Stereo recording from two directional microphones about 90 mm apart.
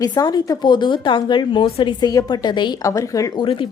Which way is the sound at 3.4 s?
70° left (ahead or behind).